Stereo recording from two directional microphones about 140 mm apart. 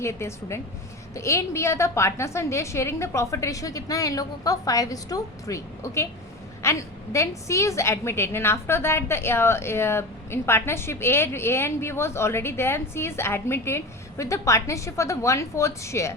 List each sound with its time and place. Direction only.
0.0 s a woman's voice: 20° left (ahead or behind)